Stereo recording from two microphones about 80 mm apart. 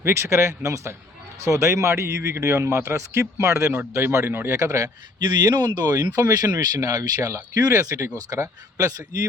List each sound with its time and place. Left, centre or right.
0.0 s speech: right
5.2 s speech: right